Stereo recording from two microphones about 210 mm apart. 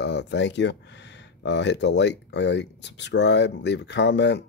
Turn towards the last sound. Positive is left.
turn(degrees=55)  # may be behind; listen again after turning